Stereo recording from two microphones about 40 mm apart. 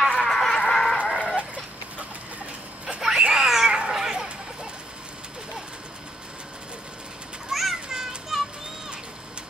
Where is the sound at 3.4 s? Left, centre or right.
Centre.